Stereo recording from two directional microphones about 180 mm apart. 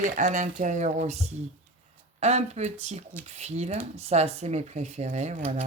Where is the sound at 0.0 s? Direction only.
45° right (ahead or behind).